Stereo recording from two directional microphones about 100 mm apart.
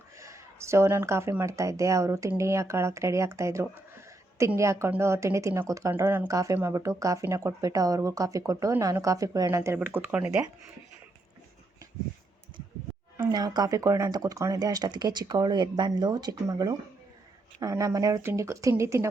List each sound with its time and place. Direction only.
0.2 s speech: 30° right (ahead or behind)
13.1 s speech: 45° right (ahead or behind)
18.2 s speech: 25° right (ahead or behind)